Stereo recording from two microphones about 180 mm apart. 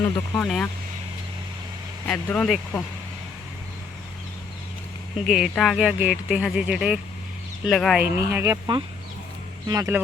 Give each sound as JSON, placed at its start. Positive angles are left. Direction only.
{"t": 0.3, "sound": "speech", "side_deg": 5}
{"t": 2.0, "sound": "speech", "side_deg": 5}
{"t": 5.2, "sound": "speech", "side_deg": 0}
{"t": 8.0, "sound": "speech", "side_deg": -15}